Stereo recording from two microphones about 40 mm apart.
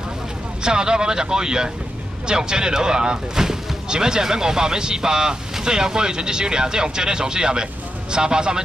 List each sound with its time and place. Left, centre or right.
0.7 s speech: centre